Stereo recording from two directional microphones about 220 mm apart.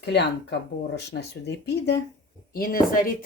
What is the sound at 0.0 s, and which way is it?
Speech, 50° left (ahead or behind).